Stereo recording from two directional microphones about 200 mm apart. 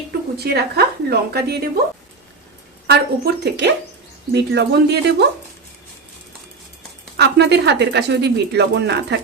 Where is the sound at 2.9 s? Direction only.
55° right (ahead or behind).